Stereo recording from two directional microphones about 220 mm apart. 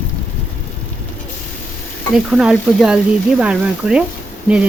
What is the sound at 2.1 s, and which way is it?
Speech, 5° right (ahead or behind).